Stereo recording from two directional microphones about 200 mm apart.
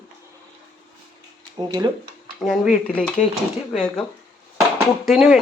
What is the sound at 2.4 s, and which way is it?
Speech, centre (ahead or behind).